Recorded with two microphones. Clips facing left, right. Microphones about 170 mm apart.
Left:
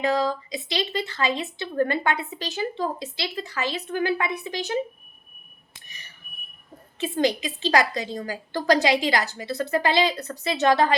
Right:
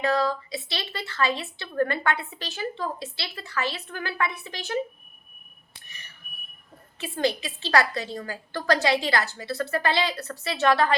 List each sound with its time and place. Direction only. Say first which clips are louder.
0.0 s a woman's voice: left 1 dB; 20° left (ahead or behind)
7.0 s a woman's voice: left 3 dB; 15° left (ahead or behind)